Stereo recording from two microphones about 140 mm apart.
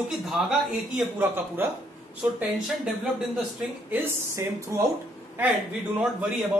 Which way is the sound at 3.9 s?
20° right (ahead or behind).